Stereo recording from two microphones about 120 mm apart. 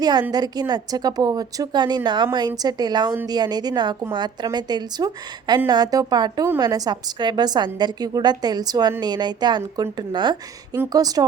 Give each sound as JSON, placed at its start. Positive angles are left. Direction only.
{"t": 0.0, "sound": "a woman's voice", "side_deg": -35}